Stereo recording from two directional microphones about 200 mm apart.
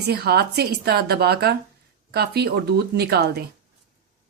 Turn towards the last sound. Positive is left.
turn(degrees=-55)  # may be behind; listen again after turning